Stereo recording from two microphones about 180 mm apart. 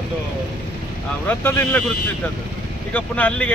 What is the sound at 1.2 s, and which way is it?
Speech, 10° left (ahead or behind).